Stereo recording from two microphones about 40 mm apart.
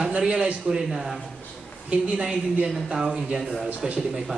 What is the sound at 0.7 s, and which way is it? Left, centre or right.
Speech, centre.